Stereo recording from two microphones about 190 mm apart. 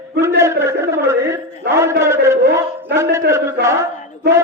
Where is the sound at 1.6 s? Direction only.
55° right (ahead or behind).